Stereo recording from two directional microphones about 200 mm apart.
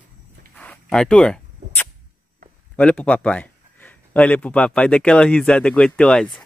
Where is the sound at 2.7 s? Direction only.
5° left (ahead or behind).